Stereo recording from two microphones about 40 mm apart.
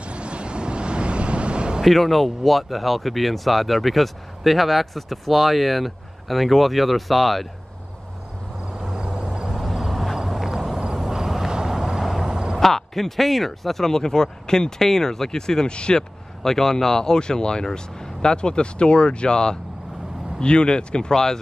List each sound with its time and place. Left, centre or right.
0.0 s a sound: right
1.8 s speech: centre
8.7 s vehicle: right
9.6 s vehicle: centre
12.3 s a sound: centre
12.5 s speech: centre; by 16.0 s left
16.0 s speech: centre